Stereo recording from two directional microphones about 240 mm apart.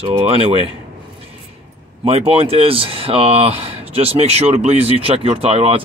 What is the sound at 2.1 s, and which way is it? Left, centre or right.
Speech, right.